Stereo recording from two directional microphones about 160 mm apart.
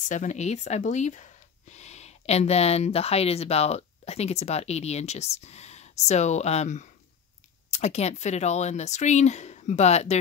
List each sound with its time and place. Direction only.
0.1 s speech: 50° left (ahead or behind)